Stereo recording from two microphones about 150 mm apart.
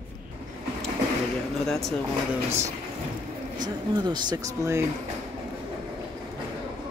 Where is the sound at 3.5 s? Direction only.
30° right (ahead or behind).